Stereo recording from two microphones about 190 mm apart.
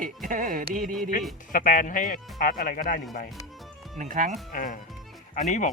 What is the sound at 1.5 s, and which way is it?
Speech, 45° left (ahead or behind).